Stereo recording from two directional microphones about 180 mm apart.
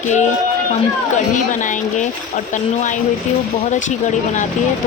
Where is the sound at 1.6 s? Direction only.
45° left (ahead or behind).